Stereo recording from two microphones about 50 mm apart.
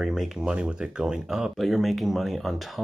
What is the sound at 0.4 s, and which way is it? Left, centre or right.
Speech, centre.